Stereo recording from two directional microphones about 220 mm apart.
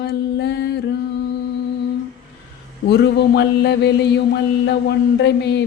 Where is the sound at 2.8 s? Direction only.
50° left (ahead or behind).